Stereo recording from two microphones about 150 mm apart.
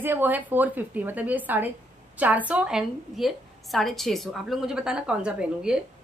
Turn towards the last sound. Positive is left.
turn(degrees=-5)  # may be behind; listen again after turning